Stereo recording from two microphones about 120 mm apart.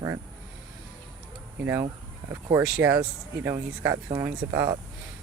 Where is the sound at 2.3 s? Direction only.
25° right (ahead or behind).